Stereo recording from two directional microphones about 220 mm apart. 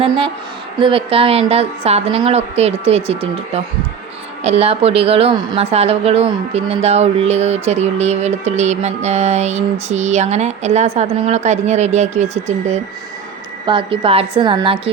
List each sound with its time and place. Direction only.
0.8 s a woman's voice: 25° right (ahead or behind)